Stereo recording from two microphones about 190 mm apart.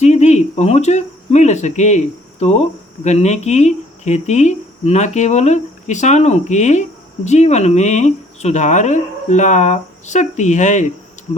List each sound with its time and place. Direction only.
0.0 s speech: 35° left (ahead or behind)